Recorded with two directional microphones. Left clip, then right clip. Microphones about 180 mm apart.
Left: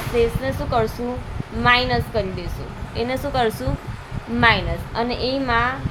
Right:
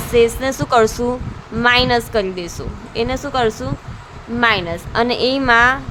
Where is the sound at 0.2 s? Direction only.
30° right (ahead or behind).